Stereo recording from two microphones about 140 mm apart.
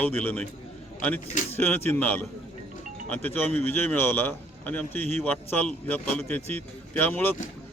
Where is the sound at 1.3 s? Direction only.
60° left (ahead or behind).